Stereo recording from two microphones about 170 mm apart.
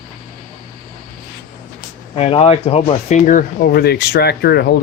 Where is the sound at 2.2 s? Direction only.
35° left (ahead or behind).